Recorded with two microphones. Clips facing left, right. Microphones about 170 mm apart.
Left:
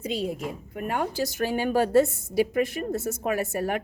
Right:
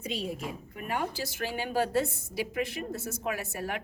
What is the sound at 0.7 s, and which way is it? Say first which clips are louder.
A woman's voice: left 5 dB; 50° left (ahead or behind).